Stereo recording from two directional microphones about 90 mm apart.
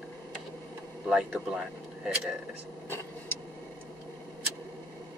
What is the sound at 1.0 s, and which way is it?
Speech, 5° right (ahead or behind).